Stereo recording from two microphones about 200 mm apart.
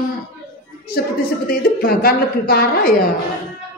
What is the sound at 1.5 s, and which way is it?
A woman's voice, 50° left (ahead or behind).